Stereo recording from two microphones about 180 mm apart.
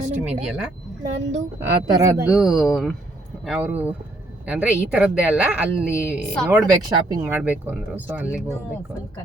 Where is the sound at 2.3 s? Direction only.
5° right (ahead or behind).